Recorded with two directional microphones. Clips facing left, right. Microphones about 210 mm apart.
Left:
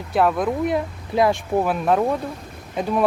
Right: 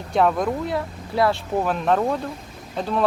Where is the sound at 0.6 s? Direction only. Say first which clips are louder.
Left 4 dB; 20° left (ahead or behind).